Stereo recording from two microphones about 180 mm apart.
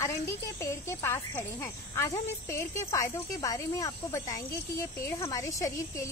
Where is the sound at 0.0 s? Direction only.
15° left (ahead or behind).